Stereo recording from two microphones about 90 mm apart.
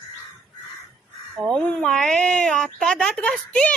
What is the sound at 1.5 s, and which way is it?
A woman's voice, 15° left (ahead or behind).